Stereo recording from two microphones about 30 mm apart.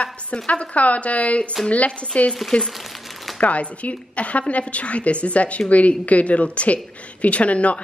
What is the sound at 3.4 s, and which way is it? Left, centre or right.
A woman's voice, left.